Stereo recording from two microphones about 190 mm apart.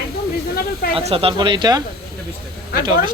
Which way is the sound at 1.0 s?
30° right (ahead or behind).